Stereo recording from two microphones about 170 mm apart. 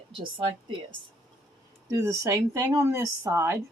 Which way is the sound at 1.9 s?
15° right (ahead or behind).